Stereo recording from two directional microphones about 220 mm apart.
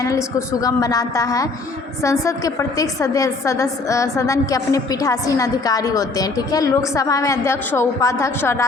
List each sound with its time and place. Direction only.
0.0 s a woman's voice: 15° left (ahead or behind)